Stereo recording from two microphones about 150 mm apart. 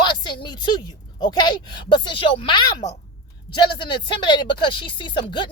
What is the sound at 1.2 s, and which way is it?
Speech, 30° left (ahead or behind).